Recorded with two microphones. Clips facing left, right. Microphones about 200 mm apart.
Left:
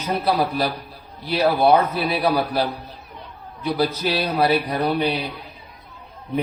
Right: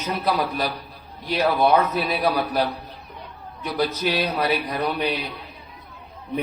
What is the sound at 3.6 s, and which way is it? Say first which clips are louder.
A man's voice: left 2 dB; 30° left (ahead or behind).